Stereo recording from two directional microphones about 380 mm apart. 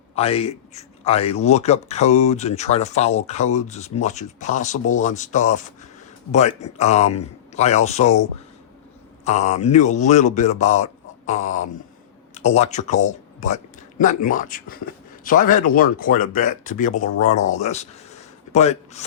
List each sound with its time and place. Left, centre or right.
0.2 s speech: centre
9.2 s speech: centre